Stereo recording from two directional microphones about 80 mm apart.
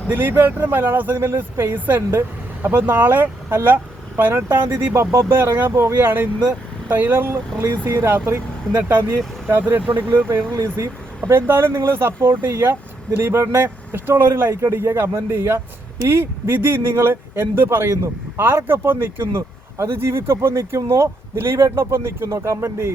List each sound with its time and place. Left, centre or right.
0.1 s speech: right
9.5 s speech: right